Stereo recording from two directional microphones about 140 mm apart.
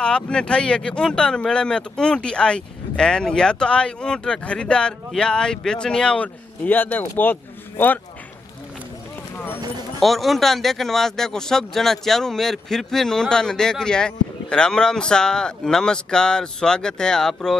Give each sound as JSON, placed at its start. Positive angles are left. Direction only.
{"t": 0.0, "sound": "speech", "side_deg": 5}
{"t": 9.9, "sound": "speech", "side_deg": 0}